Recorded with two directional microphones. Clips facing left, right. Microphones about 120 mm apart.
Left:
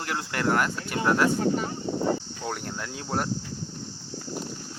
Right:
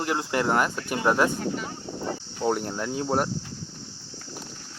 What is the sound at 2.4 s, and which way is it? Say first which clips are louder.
Speech: right 7 dB; 15° right (ahead or behind).